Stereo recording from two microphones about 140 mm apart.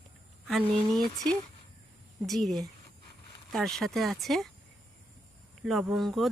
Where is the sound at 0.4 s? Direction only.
Centre (ahead or behind).